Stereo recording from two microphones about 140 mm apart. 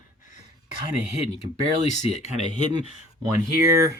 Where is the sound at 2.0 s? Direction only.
50° left (ahead or behind).